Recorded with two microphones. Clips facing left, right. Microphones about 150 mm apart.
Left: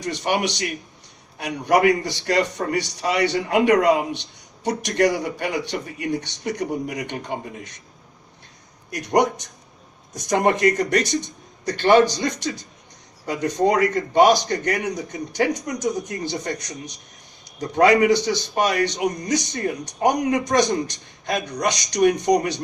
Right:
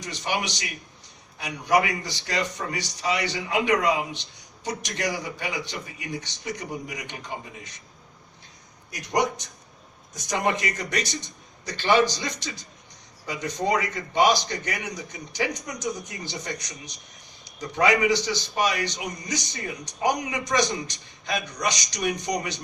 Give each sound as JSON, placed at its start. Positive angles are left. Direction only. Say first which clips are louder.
{"t": 0.0, "sound": "a man's voice", "louder": "left 6 dB", "side_deg": 60}
{"t": 8.9, "sound": "a man's voice", "louder": "left 6 dB", "side_deg": 60}